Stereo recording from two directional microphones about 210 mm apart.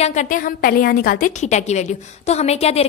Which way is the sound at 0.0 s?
35° left (ahead or behind).